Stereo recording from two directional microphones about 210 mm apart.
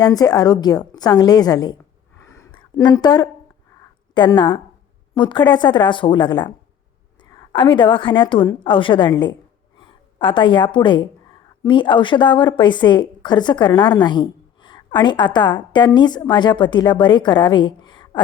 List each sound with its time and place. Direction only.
0.0 s speech: 20° left (ahead or behind)
2.2 s a sound: 15° left (ahead or behind)
4.1 s a woman's voice: 20° left (ahead or behind)